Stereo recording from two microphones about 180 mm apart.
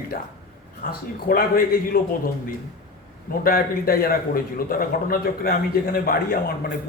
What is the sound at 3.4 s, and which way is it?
A man's voice, 55° left (ahead or behind).